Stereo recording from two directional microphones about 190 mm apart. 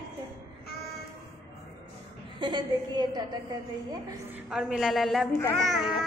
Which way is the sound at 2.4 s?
25° right (ahead or behind).